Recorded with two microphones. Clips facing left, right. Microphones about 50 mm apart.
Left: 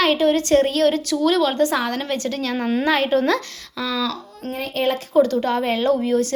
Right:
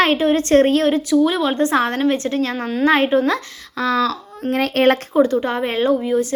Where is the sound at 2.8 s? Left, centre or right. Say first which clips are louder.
Right 6 dB; right.